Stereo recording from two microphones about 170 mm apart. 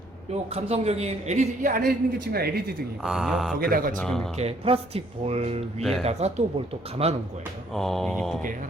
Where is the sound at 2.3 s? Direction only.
65° right (ahead or behind).